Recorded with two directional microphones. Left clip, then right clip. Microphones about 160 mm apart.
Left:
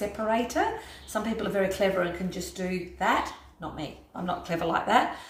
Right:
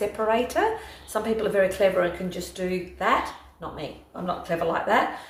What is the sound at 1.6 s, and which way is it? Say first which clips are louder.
Speech: right 3 dB; 20° right (ahead or behind).